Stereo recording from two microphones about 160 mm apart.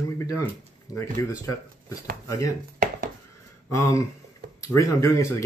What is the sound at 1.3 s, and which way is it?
Speech, 20° left (ahead or behind).